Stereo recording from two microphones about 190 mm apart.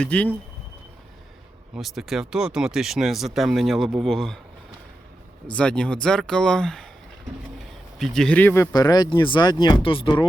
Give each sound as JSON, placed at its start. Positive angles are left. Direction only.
{"t": 0.0, "sound": "speech", "side_deg": 5}
{"t": 1.7, "sound": "speech", "side_deg": 0}
{"t": 5.5, "sound": "speech", "side_deg": 5}
{"t": 7.9, "sound": "speech", "side_deg": 0}